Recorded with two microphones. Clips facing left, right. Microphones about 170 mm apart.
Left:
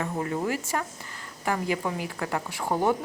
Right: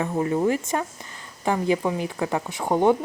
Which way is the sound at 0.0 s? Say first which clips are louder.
Right 6 dB; 20° right (ahead or behind).